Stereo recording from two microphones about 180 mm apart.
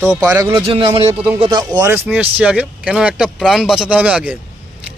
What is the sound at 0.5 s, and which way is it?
Speech, 30° right (ahead or behind).